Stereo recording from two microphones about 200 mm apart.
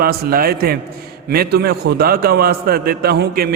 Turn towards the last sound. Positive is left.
turn(degrees=-50)  # may be behind; listen again after turning